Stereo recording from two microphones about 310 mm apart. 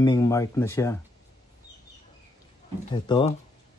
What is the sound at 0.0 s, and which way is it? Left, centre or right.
Speech, centre.